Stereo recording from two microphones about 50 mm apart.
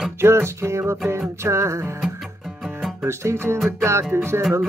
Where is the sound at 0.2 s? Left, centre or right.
Right.